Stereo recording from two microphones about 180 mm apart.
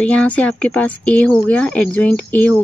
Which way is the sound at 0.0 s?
5° left (ahead or behind).